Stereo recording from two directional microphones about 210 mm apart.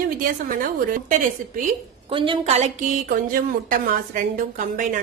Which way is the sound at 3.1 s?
40° right (ahead or behind).